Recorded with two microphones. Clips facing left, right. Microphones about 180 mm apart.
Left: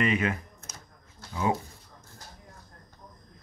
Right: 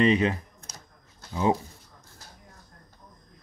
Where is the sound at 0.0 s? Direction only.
30° right (ahead or behind).